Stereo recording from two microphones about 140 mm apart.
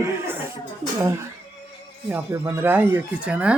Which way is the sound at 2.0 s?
15° right (ahead or behind).